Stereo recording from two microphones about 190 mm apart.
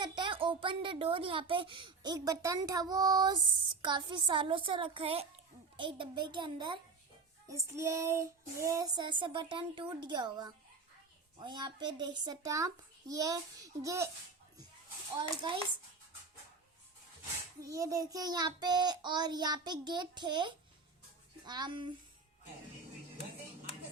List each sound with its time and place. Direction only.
0.2 s a child's voice: 25° right (ahead or behind)
5.7 s child singing: 25° right (ahead or behind)
15.2 s child singing: 25° right (ahead or behind)
17.6 s child singing: 15° right (ahead or behind)